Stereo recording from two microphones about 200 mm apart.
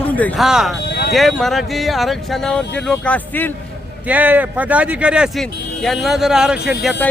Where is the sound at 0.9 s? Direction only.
55° left (ahead or behind).